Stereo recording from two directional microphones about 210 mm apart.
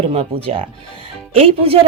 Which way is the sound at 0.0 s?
30° right (ahead or behind).